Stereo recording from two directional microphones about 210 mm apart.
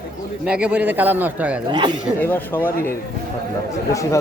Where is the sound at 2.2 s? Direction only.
10° left (ahead or behind).